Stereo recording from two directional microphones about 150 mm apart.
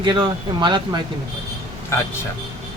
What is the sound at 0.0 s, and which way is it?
Speech, 30° right (ahead or behind).